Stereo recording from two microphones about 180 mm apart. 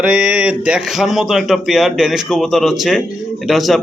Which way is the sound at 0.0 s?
5° right (ahead or behind).